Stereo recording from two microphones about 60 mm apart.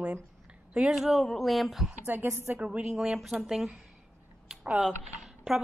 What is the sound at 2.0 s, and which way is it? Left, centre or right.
Speech, right.